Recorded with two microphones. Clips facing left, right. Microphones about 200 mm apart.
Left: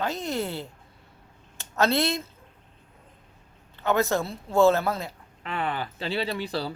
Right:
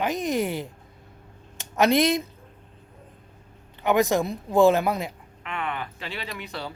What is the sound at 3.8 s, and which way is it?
Speech, 15° right (ahead or behind).